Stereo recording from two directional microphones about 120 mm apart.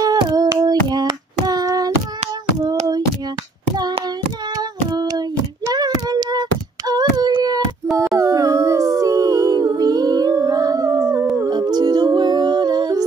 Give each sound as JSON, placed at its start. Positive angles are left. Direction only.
{"t": 0.0, "sound": "child singing", "side_deg": -30}
{"t": 4.9, "sound": "child singing", "side_deg": -35}
{"t": 6.9, "sound": "a sound", "side_deg": -35}
{"t": 8.2, "sound": "humming", "side_deg": -30}